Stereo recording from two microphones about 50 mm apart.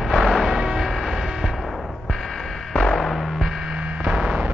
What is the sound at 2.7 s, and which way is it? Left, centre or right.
Music, centre.